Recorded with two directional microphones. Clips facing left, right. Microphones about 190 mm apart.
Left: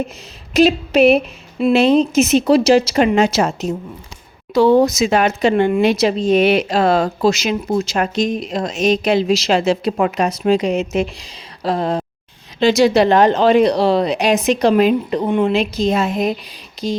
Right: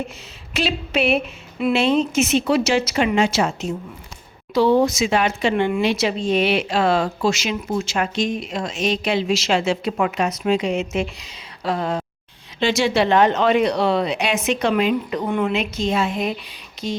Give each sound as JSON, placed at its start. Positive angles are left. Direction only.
{"t": 0.5, "sound": "a woman's voice", "side_deg": 40}